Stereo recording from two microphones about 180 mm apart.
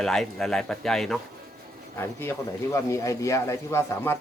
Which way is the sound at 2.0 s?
15° left (ahead or behind).